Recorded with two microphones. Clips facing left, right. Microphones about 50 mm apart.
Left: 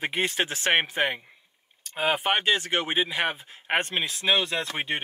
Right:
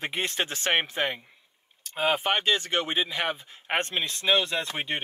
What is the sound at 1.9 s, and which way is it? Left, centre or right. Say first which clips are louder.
Speech: left 1 dB; centre.